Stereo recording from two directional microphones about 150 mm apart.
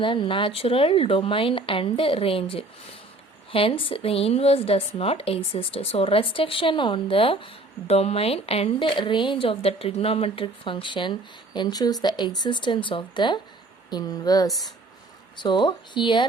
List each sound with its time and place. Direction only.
0.0 s a woman's voice: 35° left (ahead or behind)